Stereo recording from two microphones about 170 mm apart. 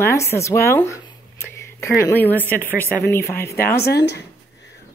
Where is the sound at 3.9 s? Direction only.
80° left.